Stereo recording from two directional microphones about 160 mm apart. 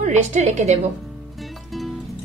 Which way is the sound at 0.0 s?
45° right (ahead or behind).